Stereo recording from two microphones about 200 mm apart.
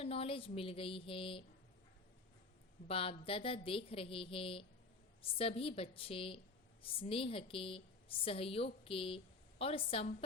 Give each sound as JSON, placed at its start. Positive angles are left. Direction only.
{"t": 0.0, "sound": "a woman's voice", "side_deg": 30}
{"t": 2.8, "sound": "a woman's voice", "side_deg": 30}